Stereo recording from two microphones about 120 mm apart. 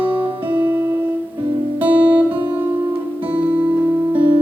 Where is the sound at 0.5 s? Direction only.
15° right (ahead or behind).